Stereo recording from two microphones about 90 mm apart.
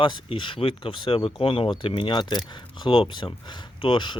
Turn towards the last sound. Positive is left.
turn(degrees=60)  # may be behind; listen again after turning